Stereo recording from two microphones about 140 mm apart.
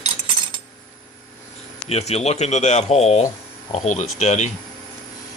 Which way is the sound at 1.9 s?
50° left (ahead or behind).